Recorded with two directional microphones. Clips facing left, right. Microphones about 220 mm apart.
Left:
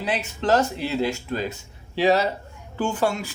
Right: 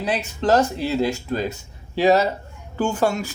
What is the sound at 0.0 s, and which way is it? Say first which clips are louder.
Speech: right 3 dB; 40° right (ahead or behind).